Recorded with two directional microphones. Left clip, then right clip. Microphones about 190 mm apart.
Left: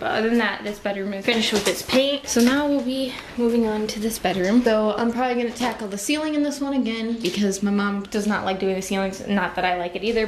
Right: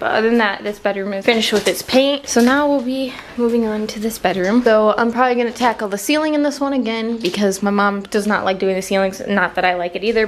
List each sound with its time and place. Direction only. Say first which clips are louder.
0.0 s a woman's voice: right 6 dB; 10° right (ahead or behind)